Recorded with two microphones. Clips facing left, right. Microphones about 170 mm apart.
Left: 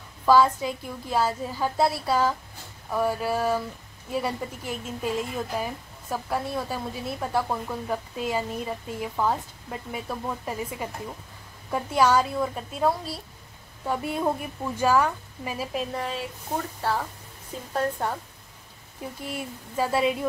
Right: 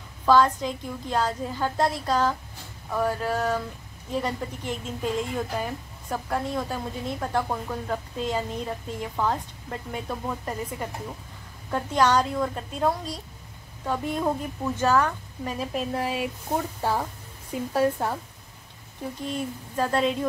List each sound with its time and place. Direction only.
0.2 s a woman's voice: 10° left (ahead or behind)
16.8 s a woman's voice: 15° right (ahead or behind)
17.7 s a woman's voice: 5° right (ahead or behind)
19.2 s speech: 5° left (ahead or behind)